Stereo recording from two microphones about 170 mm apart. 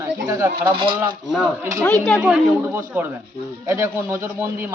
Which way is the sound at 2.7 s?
10° right (ahead or behind).